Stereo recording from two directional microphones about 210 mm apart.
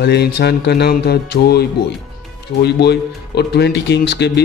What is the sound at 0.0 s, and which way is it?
A man's voice, 50° left (ahead or behind).